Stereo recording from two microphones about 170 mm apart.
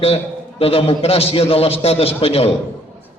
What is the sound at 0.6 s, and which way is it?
A man's voice, 35° left (ahead or behind).